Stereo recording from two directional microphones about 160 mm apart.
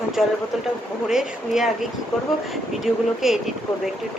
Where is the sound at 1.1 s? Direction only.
Centre (ahead or behind).